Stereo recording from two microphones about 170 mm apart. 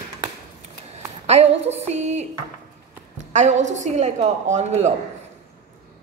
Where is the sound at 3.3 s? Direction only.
45° right (ahead or behind).